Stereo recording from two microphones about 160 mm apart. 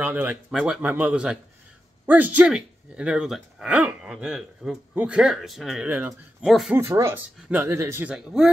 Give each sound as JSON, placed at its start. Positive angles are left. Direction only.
{"t": 0.0, "sound": "speech", "side_deg": -10}
{"t": 6.7, "sound": "speech", "side_deg": -20}